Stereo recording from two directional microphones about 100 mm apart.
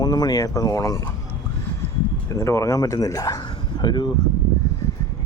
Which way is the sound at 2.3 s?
30° left (ahead or behind).